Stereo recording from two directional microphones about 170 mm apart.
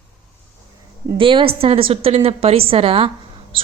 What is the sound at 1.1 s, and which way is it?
A woman's voice, 30° right (ahead or behind).